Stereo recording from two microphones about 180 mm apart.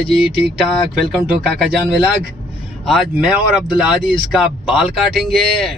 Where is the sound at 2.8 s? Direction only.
Centre (ahead or behind).